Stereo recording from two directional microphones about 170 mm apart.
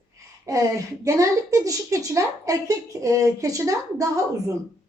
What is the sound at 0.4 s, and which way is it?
A woman's voice, 20° right (ahead or behind).